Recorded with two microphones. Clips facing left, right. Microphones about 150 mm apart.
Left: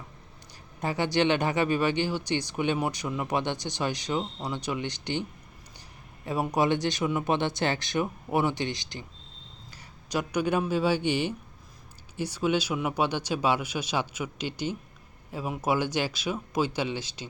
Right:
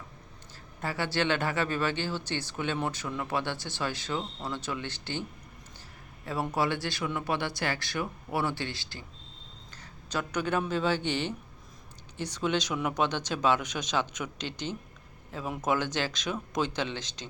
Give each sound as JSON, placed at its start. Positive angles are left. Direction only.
{"t": 0.8, "sound": "speech", "side_deg": 20}
{"t": 6.2, "sound": "speech", "side_deg": 15}
{"t": 10.1, "sound": "speech", "side_deg": 15}